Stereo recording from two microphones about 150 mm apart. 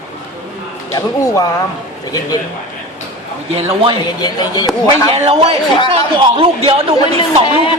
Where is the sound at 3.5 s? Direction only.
40° right (ahead or behind).